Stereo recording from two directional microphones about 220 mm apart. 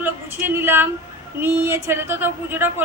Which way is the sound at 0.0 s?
10° right (ahead or behind).